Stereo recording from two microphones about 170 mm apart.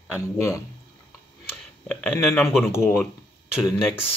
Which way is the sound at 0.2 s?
20° left (ahead or behind).